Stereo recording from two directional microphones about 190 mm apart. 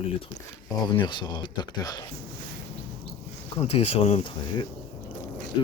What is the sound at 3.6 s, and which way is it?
Speech, 30° left (ahead or behind).